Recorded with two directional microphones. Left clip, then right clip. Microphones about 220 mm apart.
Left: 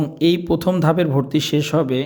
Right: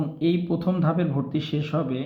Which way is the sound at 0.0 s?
50° left (ahead or behind).